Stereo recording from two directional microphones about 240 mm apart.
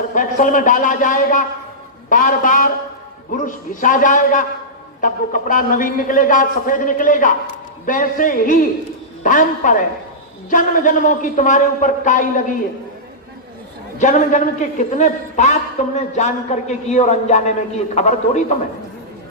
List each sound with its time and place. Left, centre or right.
0.1 s a man's voice: left
14.0 s a man's voice: left